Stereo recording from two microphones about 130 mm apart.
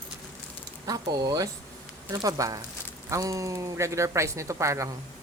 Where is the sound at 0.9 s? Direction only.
30° right (ahead or behind).